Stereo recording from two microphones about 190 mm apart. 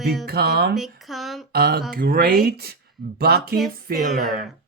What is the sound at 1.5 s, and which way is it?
Speech, 50° right (ahead or behind).